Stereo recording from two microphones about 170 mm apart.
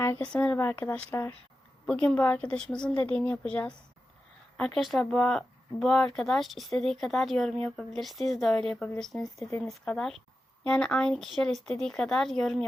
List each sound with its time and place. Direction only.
0.3 s a woman's voice: 10° left (ahead or behind)